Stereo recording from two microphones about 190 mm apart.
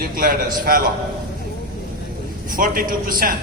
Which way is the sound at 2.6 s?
50° right (ahead or behind).